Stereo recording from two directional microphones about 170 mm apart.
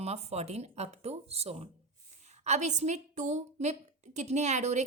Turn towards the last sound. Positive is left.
turn(degrees=-45)  # may be behind; listen again after turning